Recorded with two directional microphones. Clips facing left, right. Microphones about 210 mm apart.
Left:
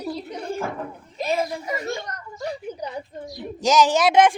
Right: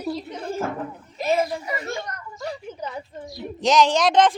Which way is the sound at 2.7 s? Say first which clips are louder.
Left 2 dB; 15° left (ahead or behind).